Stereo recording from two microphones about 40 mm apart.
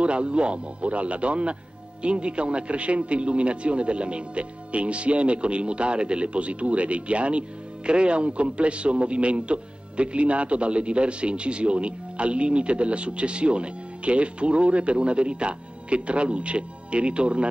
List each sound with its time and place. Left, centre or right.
0.0 s speech: right